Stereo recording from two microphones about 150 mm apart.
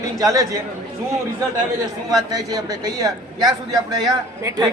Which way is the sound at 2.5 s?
25° right (ahead or behind).